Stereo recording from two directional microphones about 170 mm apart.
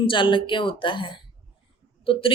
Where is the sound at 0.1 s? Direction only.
30° left (ahead or behind).